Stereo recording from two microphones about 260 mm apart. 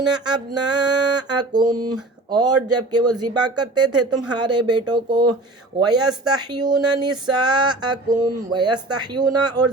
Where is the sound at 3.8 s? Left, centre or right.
Right.